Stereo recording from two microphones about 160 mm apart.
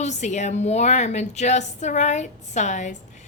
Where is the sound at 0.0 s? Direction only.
45° left (ahead or behind).